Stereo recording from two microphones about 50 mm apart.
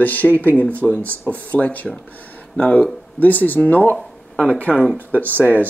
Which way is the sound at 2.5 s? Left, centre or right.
Left.